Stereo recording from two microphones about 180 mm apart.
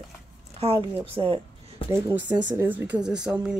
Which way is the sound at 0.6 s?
35° right (ahead or behind).